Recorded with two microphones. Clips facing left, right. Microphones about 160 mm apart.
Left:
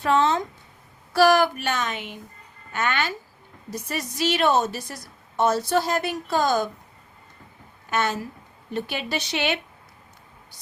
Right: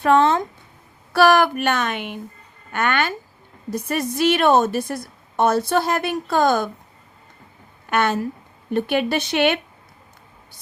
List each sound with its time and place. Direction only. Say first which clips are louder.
0.0 s a woman's voice: right 5 dB; 55° right (ahead or behind)
7.9 s a woman's voice: right 5 dB; 60° right (ahead or behind)